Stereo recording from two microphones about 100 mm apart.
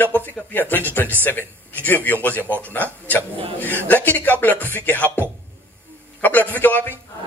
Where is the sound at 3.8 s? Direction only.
15° left (ahead or behind).